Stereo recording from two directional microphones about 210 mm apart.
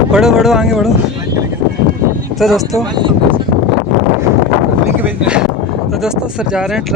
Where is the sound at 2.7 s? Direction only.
20° right (ahead or behind).